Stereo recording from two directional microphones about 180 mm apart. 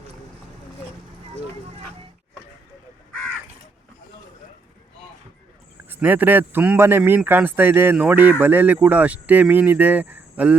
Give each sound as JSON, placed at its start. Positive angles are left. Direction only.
{"t": 5.9, "sound": "speech", "side_deg": -10}